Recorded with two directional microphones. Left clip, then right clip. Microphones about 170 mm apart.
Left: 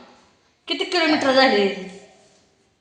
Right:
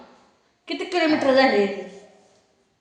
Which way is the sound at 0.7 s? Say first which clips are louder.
Left 2 dB; 30° left (ahead or behind).